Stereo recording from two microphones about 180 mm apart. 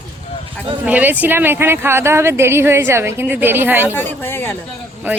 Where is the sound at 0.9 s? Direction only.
10° right (ahead or behind).